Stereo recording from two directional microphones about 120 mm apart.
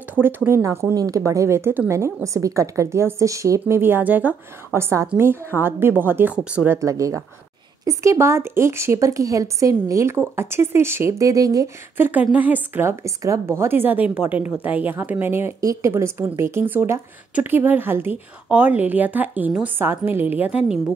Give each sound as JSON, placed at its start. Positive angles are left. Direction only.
{"t": 0.1, "sound": "a woman's voice", "side_deg": -15}
{"t": 6.8, "sound": "speech", "side_deg": -25}
{"t": 12.0, "sound": "a woman's voice", "side_deg": -15}